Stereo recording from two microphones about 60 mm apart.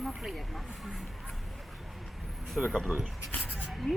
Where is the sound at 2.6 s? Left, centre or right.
Centre.